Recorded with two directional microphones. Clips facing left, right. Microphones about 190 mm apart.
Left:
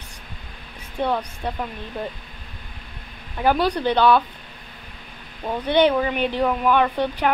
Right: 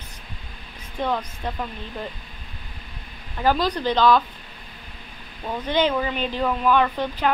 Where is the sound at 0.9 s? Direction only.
10° left (ahead or behind).